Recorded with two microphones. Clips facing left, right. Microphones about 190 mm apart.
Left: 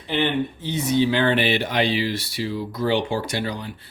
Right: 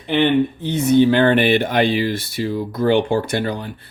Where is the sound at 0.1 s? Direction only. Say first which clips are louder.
Right 7 dB; 60° right (ahead or behind).